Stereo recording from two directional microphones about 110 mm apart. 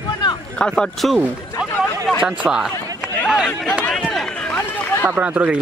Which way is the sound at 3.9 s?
Centre (ahead or behind).